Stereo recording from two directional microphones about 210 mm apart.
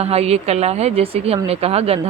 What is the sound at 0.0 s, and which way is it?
Speech, 30° right (ahead or behind).